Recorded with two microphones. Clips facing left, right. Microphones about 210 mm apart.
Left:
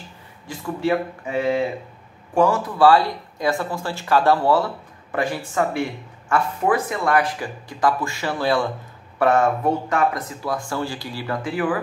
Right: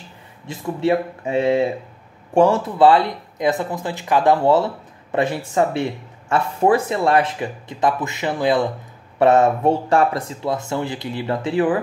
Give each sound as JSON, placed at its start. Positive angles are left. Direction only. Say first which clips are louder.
{"t": 0.5, "sound": "speech", "louder": "right 3 dB", "side_deg": -25}